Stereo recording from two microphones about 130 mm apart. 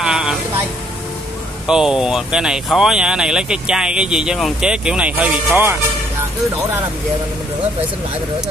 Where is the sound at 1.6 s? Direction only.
5° right (ahead or behind).